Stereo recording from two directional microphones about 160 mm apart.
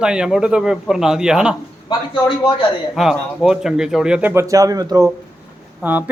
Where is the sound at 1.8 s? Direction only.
30° left (ahead or behind).